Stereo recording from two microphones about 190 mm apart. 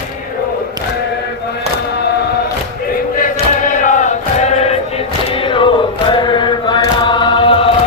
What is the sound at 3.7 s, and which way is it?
Chant, 40° left (ahead or behind).